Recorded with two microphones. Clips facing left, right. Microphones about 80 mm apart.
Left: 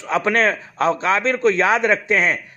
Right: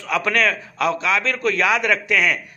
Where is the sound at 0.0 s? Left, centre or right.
Left.